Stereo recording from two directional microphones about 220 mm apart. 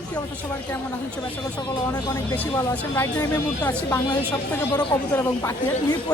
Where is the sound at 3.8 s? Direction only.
15° left (ahead or behind).